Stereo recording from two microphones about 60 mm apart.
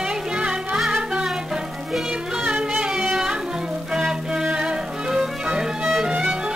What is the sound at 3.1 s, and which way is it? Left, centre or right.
Music, centre.